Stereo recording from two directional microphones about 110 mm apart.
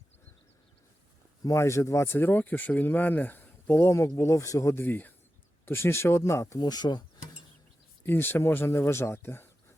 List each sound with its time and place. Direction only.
1.5 s speech: 25° left (ahead or behind)
6.6 s speech: 40° left (ahead or behind)
8.0 s speech: 20° left (ahead or behind)